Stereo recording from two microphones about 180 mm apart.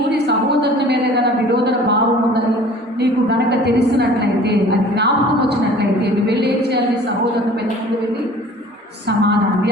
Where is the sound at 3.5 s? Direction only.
70° right (ahead or behind).